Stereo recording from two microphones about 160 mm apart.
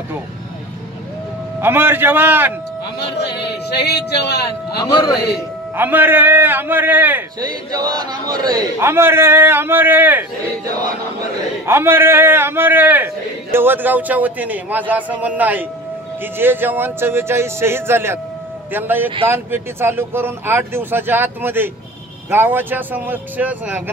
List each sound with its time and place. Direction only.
1.6 s a man's voice: 15° right (ahead or behind)
3.0 s speech: 90° left
5.8 s a man's voice: 10° right (ahead or behind)
7.3 s a man's voice: 25° right (ahead or behind)
11.6 s a man's voice: 15° right (ahead or behind)